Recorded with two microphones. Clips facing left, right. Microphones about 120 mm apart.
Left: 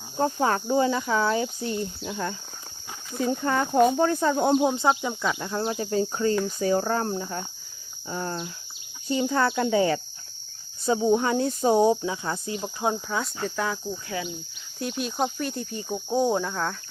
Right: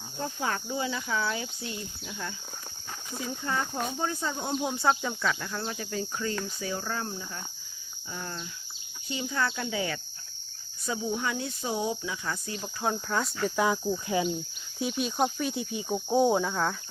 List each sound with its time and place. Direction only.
0.2 s speech: 40° left (ahead or behind)
4.6 s speech: 20° left (ahead or behind)
13.1 s speech: 5° left (ahead or behind)
13.6 s cricket: 10° right (ahead or behind)
14.8 s speech: centre (ahead or behind)